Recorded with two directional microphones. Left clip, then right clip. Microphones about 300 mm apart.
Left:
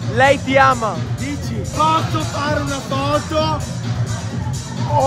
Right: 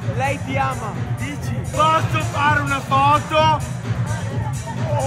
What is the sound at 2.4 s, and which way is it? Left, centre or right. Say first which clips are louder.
Music: right 6 dB; right.